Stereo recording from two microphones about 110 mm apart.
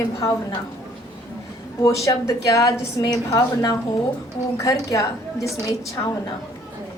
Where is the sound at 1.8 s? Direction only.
30° left (ahead or behind).